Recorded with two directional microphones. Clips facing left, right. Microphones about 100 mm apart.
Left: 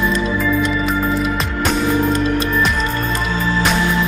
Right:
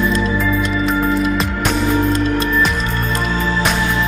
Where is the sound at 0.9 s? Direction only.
Centre (ahead or behind).